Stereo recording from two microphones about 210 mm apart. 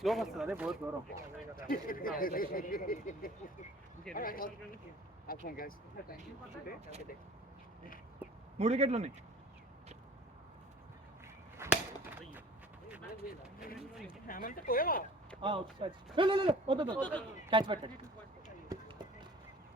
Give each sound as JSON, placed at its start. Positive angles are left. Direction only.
{"t": 0.0, "sound": "speech", "side_deg": 0}
{"t": 1.7, "sound": "speech", "side_deg": 40}
{"t": 8.5, "sound": "a man's voice", "side_deg": -30}
{"t": 11.5, "sound": "chop", "side_deg": -10}
{"t": 14.3, "sound": "speech", "side_deg": 40}
{"t": 15.4, "sound": "speech", "side_deg": -25}
{"t": 17.0, "sound": "speech", "side_deg": 5}
{"t": 17.5, "sound": "speech", "side_deg": -25}
{"t": 18.7, "sound": "a sound", "side_deg": -20}